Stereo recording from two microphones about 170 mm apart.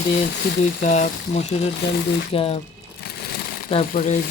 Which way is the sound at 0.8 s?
50° left (ahead or behind).